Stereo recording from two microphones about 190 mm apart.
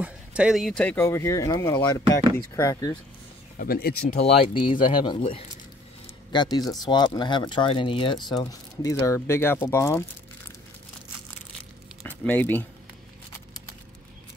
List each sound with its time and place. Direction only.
0.0 s speech: 5° right (ahead or behind); by 3.0 s 15° left (ahead or behind)
3.5 s speech: 50° left (ahead or behind)
4.2 s speech: 25° left (ahead or behind)
12.1 s speech: 10° left (ahead or behind)